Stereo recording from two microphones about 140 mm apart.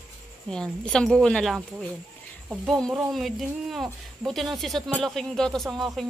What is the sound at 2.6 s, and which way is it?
Speech, centre (ahead or behind).